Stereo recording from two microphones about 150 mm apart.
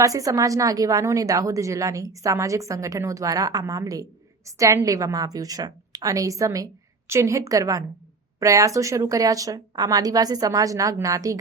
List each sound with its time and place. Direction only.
0.0 s a woman's voice: 20° right (ahead or behind)